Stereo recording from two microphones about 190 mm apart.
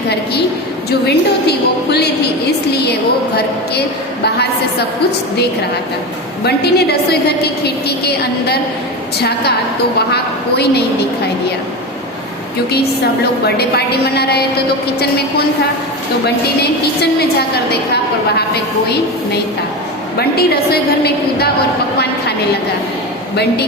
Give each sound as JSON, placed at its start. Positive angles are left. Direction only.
{"t": 0.9, "sound": "a woman's voice", "side_deg": 60}
{"t": 3.3, "sound": "a woman's voice", "side_deg": 60}
{"t": 6.4, "sound": "a woman's voice", "side_deg": 60}
{"t": 13.6, "sound": "a woman's voice", "side_deg": 55}
{"t": 16.2, "sound": "a woman's voice", "side_deg": 60}
{"t": 23.3, "sound": "a woman's voice", "side_deg": 60}